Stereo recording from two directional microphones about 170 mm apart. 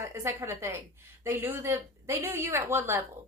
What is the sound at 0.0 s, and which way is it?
A woman's voice, 15° right (ahead or behind).